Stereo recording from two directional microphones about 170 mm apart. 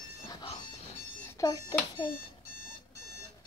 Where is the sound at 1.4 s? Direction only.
20° left (ahead or behind).